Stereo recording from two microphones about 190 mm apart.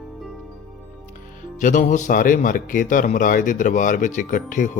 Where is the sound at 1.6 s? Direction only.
40° left (ahead or behind).